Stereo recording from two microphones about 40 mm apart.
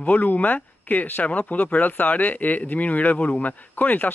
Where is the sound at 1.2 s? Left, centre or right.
Left.